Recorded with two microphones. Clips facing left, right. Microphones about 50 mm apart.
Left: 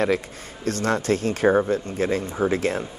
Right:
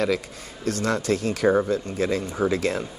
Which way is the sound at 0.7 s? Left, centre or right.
Left.